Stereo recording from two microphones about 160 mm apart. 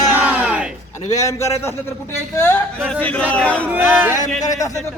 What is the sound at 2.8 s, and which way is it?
Speech, 5° left (ahead or behind).